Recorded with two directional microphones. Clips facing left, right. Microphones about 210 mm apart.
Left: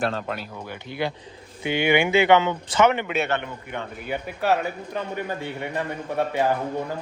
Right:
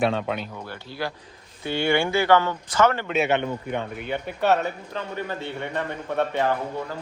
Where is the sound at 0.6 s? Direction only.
15° left (ahead or behind).